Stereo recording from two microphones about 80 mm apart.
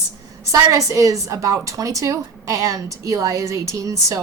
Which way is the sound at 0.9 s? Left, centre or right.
Right.